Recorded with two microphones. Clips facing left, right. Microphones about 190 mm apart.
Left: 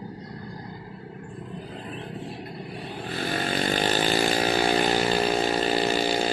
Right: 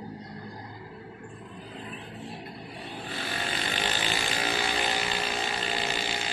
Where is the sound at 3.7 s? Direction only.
40° left (ahead or behind).